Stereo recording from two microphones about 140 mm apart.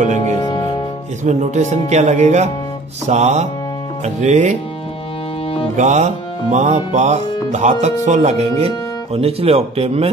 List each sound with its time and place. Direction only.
0.4 s music: 30° left (ahead or behind)
1.2 s speech: 55° right (ahead or behind)
5.8 s speech: 55° right (ahead or behind)